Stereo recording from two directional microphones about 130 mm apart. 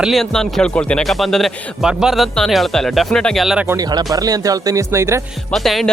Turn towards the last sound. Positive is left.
turn(degrees=0)  # may be behind; listen again after turning